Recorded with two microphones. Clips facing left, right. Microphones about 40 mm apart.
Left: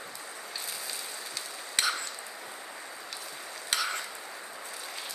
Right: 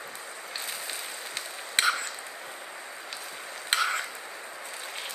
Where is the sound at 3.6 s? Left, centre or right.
Right.